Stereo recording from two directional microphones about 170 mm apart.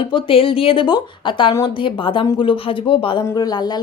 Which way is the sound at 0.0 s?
30° left (ahead or behind).